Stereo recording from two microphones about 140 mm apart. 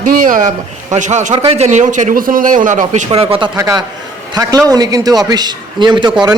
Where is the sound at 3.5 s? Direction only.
20° right (ahead or behind).